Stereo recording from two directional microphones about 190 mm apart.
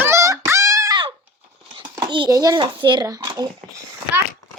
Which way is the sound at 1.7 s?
25° right (ahead or behind).